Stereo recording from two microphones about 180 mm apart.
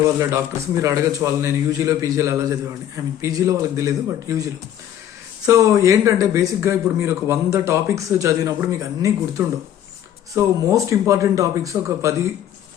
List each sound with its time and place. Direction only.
0.8 s a man's voice: 15° right (ahead or behind)
5.5 s a man's voice: 15° right (ahead or behind)